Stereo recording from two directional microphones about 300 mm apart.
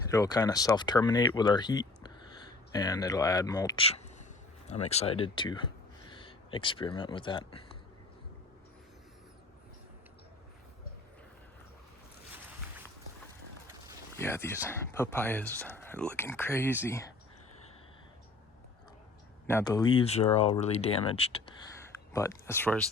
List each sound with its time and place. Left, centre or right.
0.1 s speech: centre
14.2 s speech: centre
19.5 s speech: centre
22.1 s speech: centre